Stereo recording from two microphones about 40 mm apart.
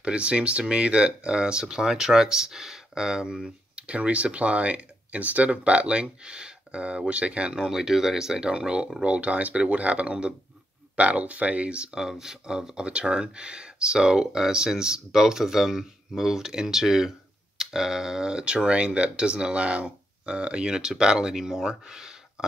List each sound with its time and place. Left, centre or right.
0.0 s speech: right; by 8.4 s centre
8.4 s speech: right